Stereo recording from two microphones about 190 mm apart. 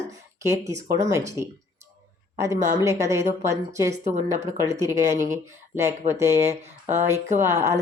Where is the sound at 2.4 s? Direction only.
15° right (ahead or behind).